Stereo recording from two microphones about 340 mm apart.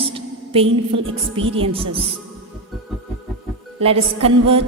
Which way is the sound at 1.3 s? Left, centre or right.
Centre.